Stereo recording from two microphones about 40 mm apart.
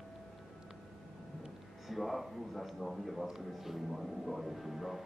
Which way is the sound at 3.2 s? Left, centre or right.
Centre.